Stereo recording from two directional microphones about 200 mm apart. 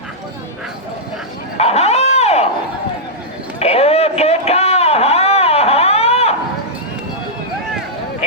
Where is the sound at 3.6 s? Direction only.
30° left (ahead or behind).